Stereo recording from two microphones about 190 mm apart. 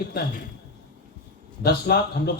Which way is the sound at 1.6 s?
60° left (ahead or behind).